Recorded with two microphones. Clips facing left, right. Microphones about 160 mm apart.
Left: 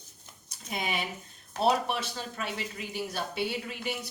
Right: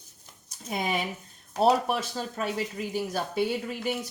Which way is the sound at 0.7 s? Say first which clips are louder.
Right 4 dB; 45° right (ahead or behind).